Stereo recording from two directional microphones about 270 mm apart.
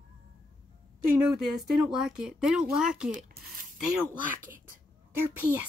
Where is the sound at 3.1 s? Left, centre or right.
Right.